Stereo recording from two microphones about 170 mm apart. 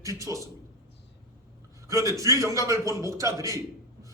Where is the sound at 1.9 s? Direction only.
20° right (ahead or behind).